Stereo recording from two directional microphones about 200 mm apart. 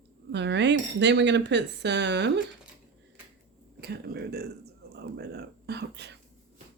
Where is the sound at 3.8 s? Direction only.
55° right (ahead or behind).